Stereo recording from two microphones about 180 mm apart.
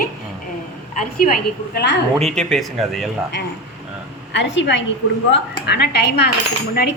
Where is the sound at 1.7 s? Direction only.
75° left (ahead or behind).